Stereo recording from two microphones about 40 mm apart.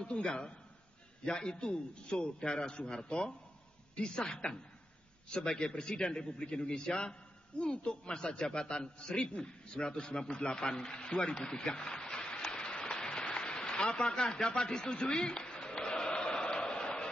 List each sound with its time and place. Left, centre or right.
0.0 s a man's voice: left
12.5 s applause: left
13.4 s a man's voice: left
15.6 s a sound: left